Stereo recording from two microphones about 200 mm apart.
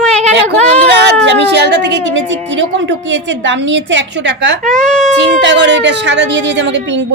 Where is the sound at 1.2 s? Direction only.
60° right (ahead or behind).